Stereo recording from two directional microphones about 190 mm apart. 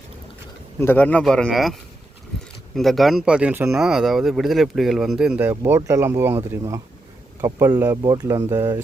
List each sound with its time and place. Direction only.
0.8 s speech: 10° left (ahead or behind)
2.7 s speech: centre (ahead or behind); by 8.8 s 15° right (ahead or behind)